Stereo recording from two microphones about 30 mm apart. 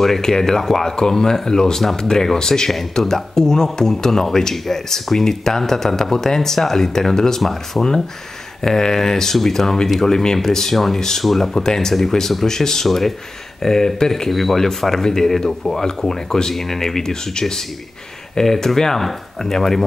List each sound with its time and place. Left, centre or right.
0.0 s speech: centre
0.9 s speech: left
2.7 s speech: centre
3.3 s speech: centre
11.2 s speech: centre
12.8 s speech: centre
14.3 s speech: centre